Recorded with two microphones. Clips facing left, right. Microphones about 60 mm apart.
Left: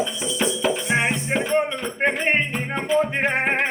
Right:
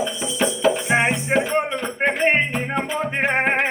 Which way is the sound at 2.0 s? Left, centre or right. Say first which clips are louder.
Right 2 dB; centre.